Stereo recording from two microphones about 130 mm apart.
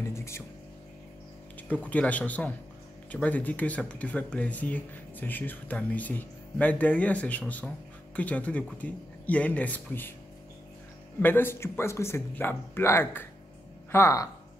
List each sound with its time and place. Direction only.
0.0 s music: 20° left (ahead or behind)
1.7 s speech: 10° left (ahead or behind)
11.1 s speech: 15° left (ahead or behind)